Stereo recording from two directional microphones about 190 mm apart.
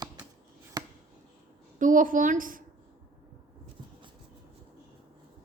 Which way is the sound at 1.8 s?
45° right (ahead or behind).